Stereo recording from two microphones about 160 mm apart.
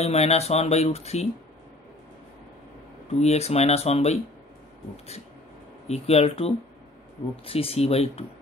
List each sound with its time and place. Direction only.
0.0 s speech: 40° left (ahead or behind)
3.2 s speech: 40° left (ahead or behind)
5.9 s speech: 40° left (ahead or behind)